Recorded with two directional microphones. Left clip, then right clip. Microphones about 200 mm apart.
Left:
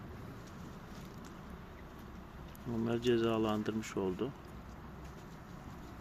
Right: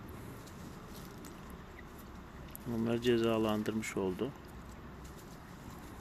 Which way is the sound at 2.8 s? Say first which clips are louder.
Right 1 dB; centre (ahead or behind).